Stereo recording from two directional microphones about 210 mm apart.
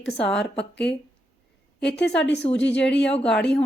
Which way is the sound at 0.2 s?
Centre (ahead or behind).